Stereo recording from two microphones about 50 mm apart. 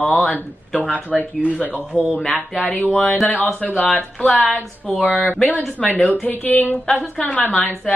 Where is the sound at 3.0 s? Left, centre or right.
Centre.